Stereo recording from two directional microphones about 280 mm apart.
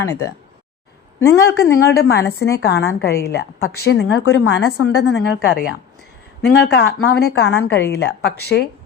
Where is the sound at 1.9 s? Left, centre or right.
Left.